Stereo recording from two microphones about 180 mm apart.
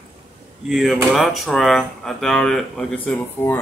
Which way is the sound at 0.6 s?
Centre (ahead or behind).